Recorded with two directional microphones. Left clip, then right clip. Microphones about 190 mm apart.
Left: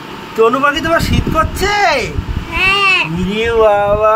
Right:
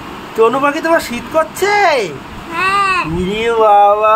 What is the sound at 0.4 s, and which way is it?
Speech, 5° right (ahead or behind).